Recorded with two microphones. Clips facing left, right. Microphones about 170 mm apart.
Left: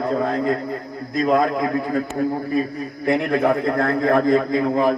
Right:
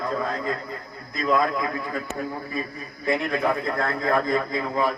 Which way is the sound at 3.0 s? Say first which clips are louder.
Left 5 dB; 65° left (ahead or behind).